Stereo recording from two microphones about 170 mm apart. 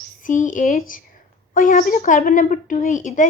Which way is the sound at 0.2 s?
50° left (ahead or behind).